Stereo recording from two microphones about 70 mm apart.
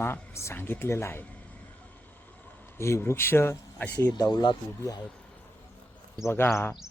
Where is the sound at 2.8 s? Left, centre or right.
Left.